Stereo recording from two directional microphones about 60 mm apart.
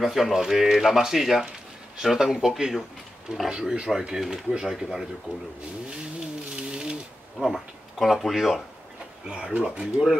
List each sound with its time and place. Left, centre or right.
0.0 s speech: centre
6.5 s sewing machine: centre
7.4 s speech: centre
9.6 s speech: centre